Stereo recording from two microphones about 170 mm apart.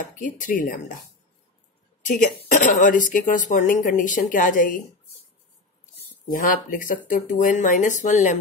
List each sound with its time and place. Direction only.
0.2 s a woman's voice: 50° left (ahead or behind)
2.5 s a woman's voice: 50° left (ahead or behind)
6.3 s a woman's voice: 55° left (ahead or behind)